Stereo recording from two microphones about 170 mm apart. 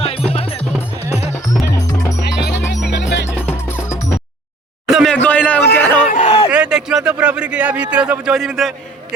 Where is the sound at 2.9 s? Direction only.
90° left.